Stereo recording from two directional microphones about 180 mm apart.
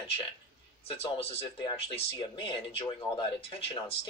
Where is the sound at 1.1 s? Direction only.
30° left (ahead or behind).